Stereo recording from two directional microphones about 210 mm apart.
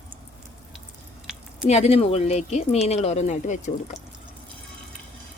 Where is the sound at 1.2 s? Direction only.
5° right (ahead or behind).